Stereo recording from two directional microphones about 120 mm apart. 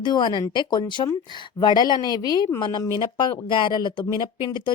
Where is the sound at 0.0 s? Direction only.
40° left (ahead or behind).